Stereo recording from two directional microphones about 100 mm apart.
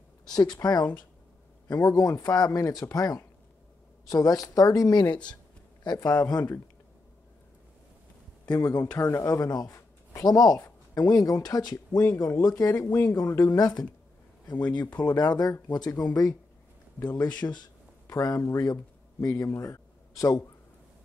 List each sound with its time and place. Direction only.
0.3 s speech: 40° left (ahead or behind)
1.7 s speech: 30° left (ahead or behind)
8.5 s speech: 40° left (ahead or behind)
13.3 s a woman's voice: 25° left (ahead or behind)
13.6 s speech: 40° left (ahead or behind)
15.0 s speech: 40° left (ahead or behind)
18.0 s speech: 35° left (ahead or behind)